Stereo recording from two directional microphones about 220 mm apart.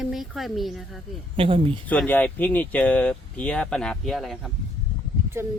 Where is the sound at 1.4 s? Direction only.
25° right (ahead or behind).